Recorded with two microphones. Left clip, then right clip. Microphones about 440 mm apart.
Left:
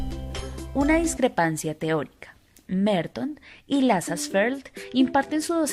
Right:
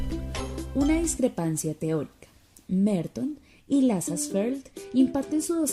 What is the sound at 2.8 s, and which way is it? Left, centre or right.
Speech, centre.